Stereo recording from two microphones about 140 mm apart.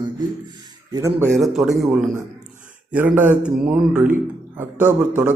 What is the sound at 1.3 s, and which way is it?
Speech, centre (ahead or behind).